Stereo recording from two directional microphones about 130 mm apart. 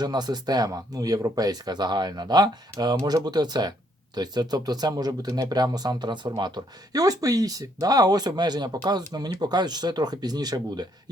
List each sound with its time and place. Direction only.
0.0 s speech: 30° right (ahead or behind)